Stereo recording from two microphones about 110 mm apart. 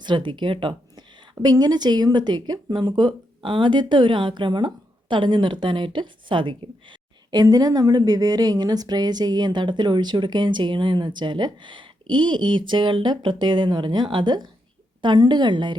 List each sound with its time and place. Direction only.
0.0 s a woman's voice: 45° right (ahead or behind)